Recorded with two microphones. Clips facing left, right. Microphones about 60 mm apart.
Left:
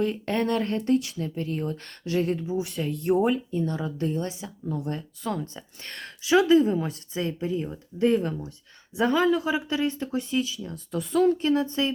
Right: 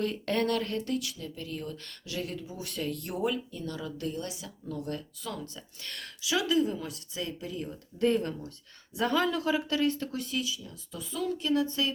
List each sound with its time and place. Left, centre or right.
0.0 s speech: left
2.6 s speech: centre
8.0 s speech: centre; by 11.9 s left